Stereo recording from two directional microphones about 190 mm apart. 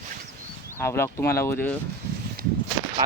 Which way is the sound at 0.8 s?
15° left (ahead or behind).